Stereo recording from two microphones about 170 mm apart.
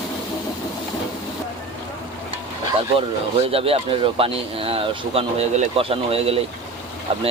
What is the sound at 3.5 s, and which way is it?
Speech, 35° right (ahead or behind).